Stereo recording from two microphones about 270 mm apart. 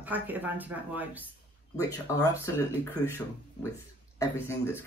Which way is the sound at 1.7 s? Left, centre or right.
Centre.